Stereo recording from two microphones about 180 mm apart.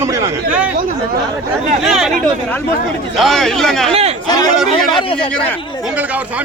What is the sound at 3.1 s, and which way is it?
Speech, centre (ahead or behind).